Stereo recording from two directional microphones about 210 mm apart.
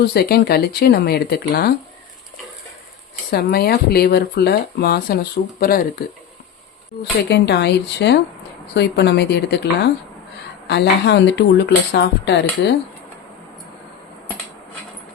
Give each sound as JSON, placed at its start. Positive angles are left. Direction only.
{"t": 0.0, "sound": "speech", "side_deg": 50}
{"t": 3.2, "sound": "speech", "side_deg": 45}